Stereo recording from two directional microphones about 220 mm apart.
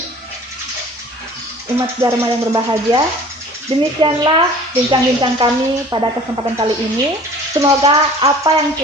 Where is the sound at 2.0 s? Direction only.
15° right (ahead or behind).